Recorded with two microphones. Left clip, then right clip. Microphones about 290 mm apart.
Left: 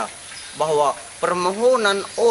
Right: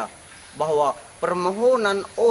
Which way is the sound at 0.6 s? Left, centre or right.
Right.